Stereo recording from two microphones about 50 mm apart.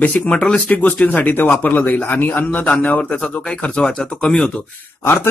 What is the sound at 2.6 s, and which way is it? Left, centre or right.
Speech, left.